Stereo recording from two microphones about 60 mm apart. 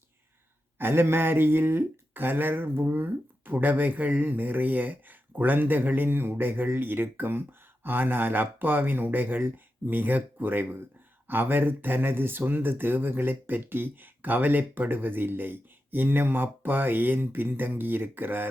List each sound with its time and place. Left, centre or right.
0.8 s speech: right